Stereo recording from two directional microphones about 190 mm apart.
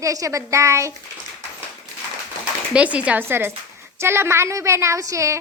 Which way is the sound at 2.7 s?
5° right (ahead or behind).